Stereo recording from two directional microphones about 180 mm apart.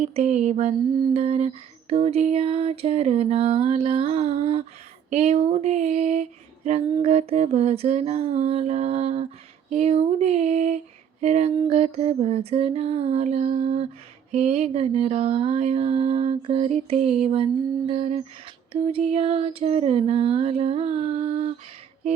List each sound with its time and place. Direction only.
0.0 s mantra: 35° right (ahead or behind)